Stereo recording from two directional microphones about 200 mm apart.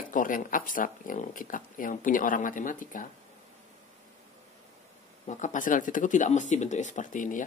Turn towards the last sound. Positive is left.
turn(degrees=40)  # may be behind; listen again after turning